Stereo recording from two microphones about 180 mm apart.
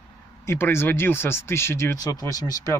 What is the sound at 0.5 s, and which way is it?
Speech, 15° left (ahead or behind).